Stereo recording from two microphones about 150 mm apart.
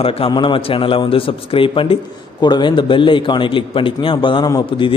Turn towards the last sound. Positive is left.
turn(degrees=35)  # may be behind; listen again after turning